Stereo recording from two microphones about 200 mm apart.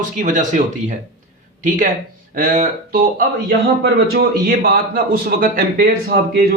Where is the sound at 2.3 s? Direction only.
40° right (ahead or behind).